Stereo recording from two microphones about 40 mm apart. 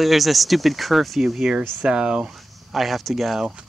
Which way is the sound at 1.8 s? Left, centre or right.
Right.